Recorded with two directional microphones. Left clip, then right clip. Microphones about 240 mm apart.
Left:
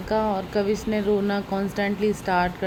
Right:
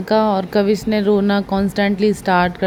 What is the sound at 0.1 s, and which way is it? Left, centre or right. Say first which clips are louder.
Speech: right 8 dB; right.